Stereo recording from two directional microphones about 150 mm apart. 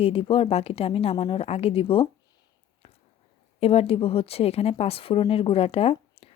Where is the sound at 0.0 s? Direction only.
40° left (ahead or behind).